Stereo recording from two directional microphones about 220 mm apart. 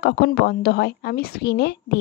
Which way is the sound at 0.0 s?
50° left (ahead or behind).